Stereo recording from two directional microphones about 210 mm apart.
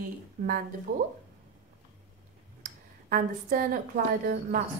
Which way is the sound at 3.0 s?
40° right (ahead or behind).